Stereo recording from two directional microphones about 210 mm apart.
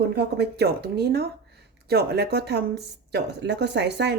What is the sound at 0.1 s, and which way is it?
Speech, 50° right (ahead or behind).